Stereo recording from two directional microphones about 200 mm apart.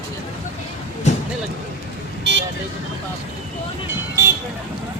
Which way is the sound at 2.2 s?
60° right (ahead or behind).